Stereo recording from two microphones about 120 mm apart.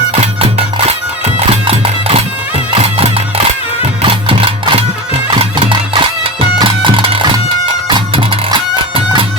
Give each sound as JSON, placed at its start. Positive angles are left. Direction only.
{"t": 0.1, "sound": "music", "side_deg": -55}